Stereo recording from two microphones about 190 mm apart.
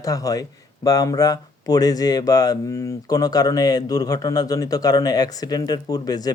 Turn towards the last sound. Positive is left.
turn(degrees=20)  # may be behind; listen again after turning